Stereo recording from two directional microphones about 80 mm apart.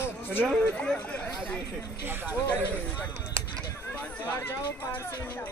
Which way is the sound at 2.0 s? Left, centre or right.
Right.